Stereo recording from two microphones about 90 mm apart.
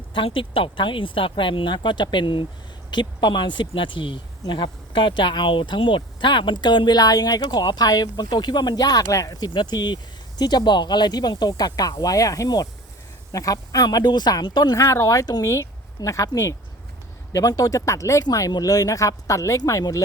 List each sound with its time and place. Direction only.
0.1 s speech: 75° left (ahead or behind); by 9.5 s 45° left (ahead or behind)
9.5 s speech: 55° left (ahead or behind)
14.8 s speech: 35° left (ahead or behind)